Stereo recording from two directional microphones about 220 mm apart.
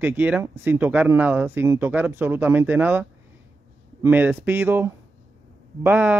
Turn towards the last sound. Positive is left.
turn(degrees=-10)  # may be behind; listen again after turning